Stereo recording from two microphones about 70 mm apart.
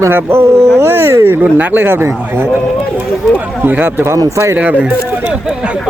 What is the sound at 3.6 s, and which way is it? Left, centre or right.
Speech, right.